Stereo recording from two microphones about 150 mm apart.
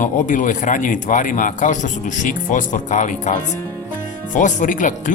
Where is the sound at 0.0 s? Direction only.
60° left (ahead or behind).